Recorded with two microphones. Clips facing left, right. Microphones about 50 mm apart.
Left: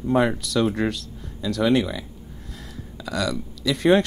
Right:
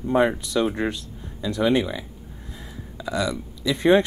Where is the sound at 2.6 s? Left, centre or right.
Centre.